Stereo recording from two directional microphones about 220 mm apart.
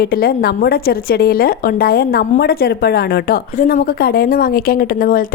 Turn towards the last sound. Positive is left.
turn(degrees=40)  # may be behind; listen again after turning